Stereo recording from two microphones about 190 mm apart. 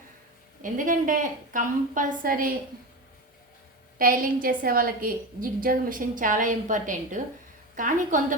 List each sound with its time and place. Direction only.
0.6 s a woman's voice: 45° right (ahead or behind)
3.9 s a woman's voice: 50° right (ahead or behind)